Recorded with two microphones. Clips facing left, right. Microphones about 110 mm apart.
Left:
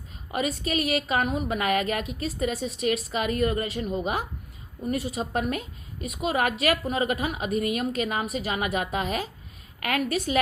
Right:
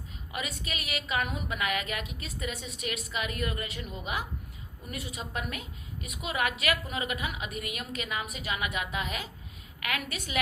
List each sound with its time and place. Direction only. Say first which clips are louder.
0.3 s a woman's voice: left 10 dB; 40° left (ahead or behind)